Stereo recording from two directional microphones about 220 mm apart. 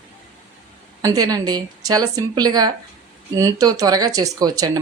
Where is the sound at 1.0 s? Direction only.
15° right (ahead or behind).